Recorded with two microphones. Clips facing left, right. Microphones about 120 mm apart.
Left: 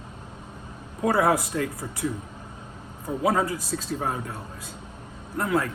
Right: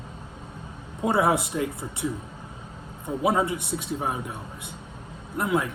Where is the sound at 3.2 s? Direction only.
20° right (ahead or behind).